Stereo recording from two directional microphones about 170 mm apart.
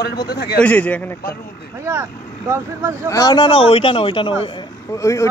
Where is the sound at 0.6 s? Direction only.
10° left (ahead or behind).